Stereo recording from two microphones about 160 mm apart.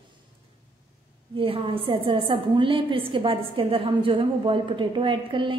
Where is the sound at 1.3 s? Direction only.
35° right (ahead or behind).